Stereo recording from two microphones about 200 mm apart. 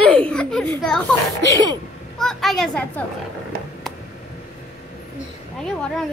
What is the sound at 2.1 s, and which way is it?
Speech, centre (ahead or behind).